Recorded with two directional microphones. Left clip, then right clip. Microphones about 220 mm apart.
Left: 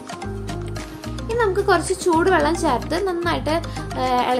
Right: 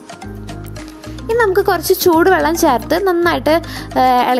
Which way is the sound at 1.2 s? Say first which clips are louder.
Right 6 dB; 40° right (ahead or behind).